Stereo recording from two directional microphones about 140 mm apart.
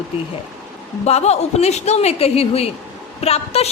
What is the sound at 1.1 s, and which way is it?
A woman's voice, 50° left (ahead or behind).